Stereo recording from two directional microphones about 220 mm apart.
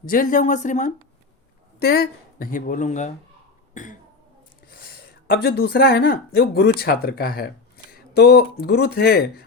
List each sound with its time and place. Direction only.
0.0 s speech: 40° left (ahead or behind)
1.8 s speech: 45° left (ahead or behind)